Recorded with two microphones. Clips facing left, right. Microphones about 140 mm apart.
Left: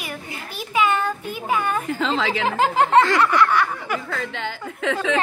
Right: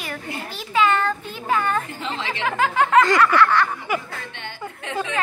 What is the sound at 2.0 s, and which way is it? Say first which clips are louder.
Speech: left 6 dB; 90° left.